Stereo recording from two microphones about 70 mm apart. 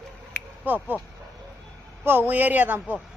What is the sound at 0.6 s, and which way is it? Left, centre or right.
Speech, right.